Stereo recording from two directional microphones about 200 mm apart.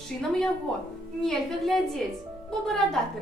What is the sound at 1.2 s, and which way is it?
A woman's voice, centre (ahead or behind).